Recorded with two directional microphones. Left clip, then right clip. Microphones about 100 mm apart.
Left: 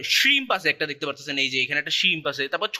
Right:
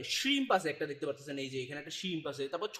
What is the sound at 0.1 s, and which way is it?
Speech, 20° right (ahead or behind).